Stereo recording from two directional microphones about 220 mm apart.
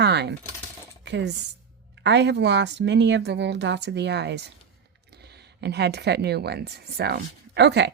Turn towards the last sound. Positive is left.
turn(degrees=-50)  # may be behind; listen again after turning